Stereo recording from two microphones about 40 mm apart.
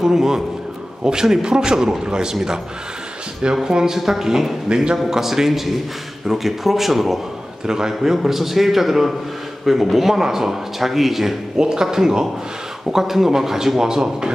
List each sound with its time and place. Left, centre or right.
0.0 s a man's voice: centre
3.6 s a man's voice: centre
7.6 s a man's voice: centre
11.5 s a man's voice: centre